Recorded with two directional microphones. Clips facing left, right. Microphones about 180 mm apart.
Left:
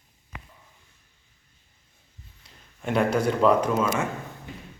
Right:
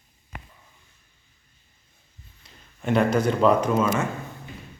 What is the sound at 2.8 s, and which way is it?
Speech, 5° left (ahead or behind).